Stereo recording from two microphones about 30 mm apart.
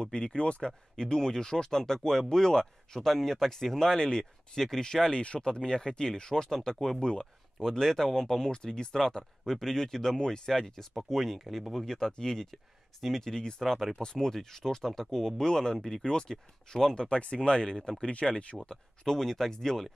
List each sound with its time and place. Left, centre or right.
0.1 s speech: left
0.6 s speech: left
4.0 s speech: left
4.6 s speech: centre
7.0 s speech: left
7.7 s speech: centre
11.1 s speech: centre
11.8 s speech: left
13.3 s speech: left
13.6 s speech: centre
16.1 s speech: left
17.9 s speech: left
19.0 s speech: centre